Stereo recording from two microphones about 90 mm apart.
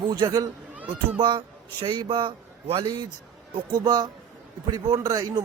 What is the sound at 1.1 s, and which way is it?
A man's voice, 65° right (ahead or behind).